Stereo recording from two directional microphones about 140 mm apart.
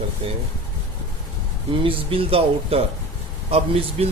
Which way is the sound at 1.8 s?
40° right (ahead or behind).